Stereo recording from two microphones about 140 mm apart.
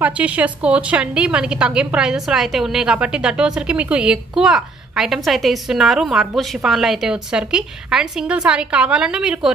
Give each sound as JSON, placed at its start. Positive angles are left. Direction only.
{"t": 0.0, "sound": "a woman's voice", "side_deg": -10}